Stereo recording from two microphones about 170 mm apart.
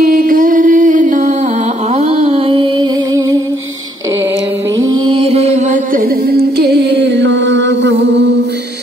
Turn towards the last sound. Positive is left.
turn(degrees=-90)